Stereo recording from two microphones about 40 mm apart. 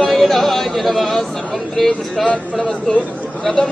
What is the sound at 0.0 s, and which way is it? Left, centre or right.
Speech, centre.